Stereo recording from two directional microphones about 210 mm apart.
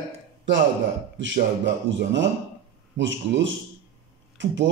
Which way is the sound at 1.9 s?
60° right (ahead or behind).